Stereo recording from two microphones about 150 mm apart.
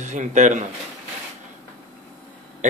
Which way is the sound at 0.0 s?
55° right (ahead or behind).